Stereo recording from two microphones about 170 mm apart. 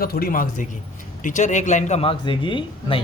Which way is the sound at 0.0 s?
60° left (ahead or behind).